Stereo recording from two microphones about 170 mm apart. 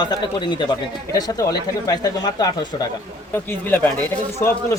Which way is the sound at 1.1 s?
20° left (ahead or behind).